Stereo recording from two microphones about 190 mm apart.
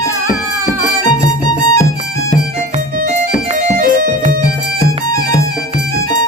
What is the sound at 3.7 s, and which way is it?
Music, 50° right (ahead or behind).